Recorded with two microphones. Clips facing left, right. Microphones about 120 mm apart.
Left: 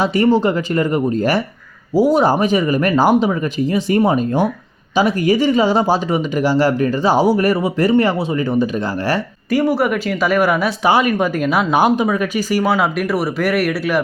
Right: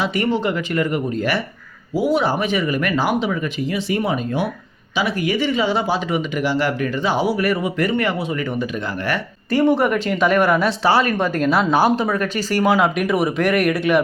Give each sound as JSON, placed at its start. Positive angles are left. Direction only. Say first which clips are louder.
{"t": 0.0, "sound": "speech", "louder": "left 6 dB", "side_deg": 35}
{"t": 9.5, "sound": "speech", "louder": "even", "side_deg": 10}